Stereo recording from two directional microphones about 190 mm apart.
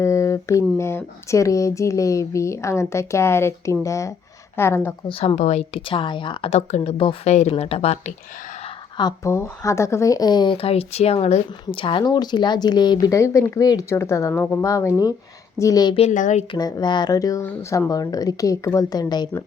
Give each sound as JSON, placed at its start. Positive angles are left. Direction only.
{"t": 0.0, "sound": "speech", "side_deg": 15}
{"t": 5.0, "sound": "a woman's voice", "side_deg": 30}
{"t": 8.6, "sound": "speech", "side_deg": 20}
{"t": 16.0, "sound": "a woman's voice", "side_deg": 40}
{"t": 16.6, "sound": "speech", "side_deg": 20}